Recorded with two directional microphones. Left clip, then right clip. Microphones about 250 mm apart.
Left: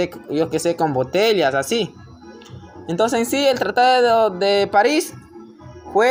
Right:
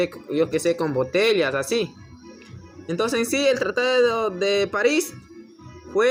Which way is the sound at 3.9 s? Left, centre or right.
Left.